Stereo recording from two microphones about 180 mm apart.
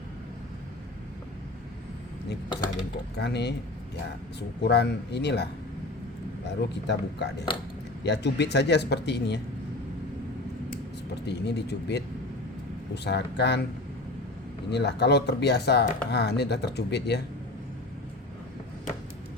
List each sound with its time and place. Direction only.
3.2 s speech: 70° left (ahead or behind)
6.8 s speech: 70° left (ahead or behind)
11.1 s speech: 70° left (ahead or behind)
14.7 s speech: 70° left (ahead or behind)